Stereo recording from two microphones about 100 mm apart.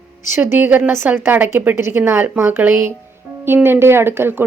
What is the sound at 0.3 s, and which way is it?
Speech, 25° right (ahead or behind).